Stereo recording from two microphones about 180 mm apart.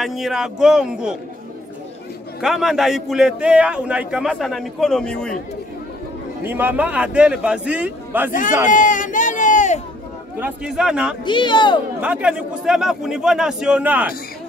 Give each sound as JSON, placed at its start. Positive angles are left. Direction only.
{"t": 0.0, "sound": "a man's voice", "side_deg": 0}
{"t": 2.4, "sound": "a man's voice", "side_deg": 0}
{"t": 6.4, "sound": "a man's voice", "side_deg": -10}
{"t": 8.3, "sound": "a man's voice", "side_deg": 45}
{"t": 10.4, "sound": "a man's voice", "side_deg": -5}
{"t": 11.2, "sound": "speech", "side_deg": 25}
{"t": 12.0, "sound": "a man's voice", "side_deg": -5}